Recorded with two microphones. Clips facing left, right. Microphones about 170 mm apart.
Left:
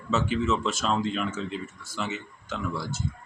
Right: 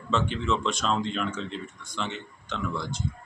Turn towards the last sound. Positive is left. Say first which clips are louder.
# even
turn(degrees=5)  # may be behind; listen again after turning